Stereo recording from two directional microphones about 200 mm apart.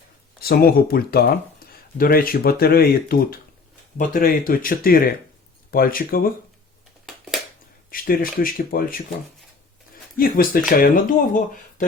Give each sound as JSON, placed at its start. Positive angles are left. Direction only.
{"t": 0.3, "sound": "speech", "side_deg": 50}
{"t": 7.9, "sound": "speech", "side_deg": 45}
{"t": 10.2, "sound": "speech", "side_deg": 45}